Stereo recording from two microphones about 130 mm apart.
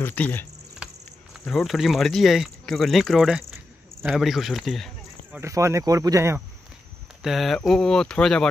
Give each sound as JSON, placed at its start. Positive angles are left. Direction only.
{"t": 0.0, "sound": "speech", "side_deg": 15}
{"t": 0.8, "sound": "cricket", "side_deg": -10}
{"t": 1.4, "sound": "speech", "side_deg": 0}
{"t": 5.4, "sound": "speech", "side_deg": -20}
{"t": 7.2, "sound": "speech", "side_deg": 0}